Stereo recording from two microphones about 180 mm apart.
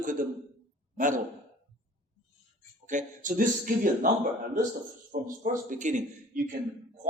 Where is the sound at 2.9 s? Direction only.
45° right (ahead or behind).